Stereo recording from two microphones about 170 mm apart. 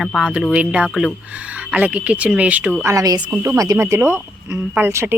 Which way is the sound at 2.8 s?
20° right (ahead or behind).